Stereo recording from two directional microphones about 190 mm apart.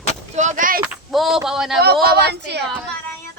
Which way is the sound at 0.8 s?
Centre (ahead or behind).